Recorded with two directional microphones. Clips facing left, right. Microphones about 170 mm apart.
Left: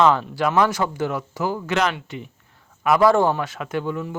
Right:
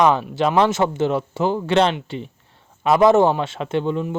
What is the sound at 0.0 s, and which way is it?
A man's voice, 15° right (ahead or behind).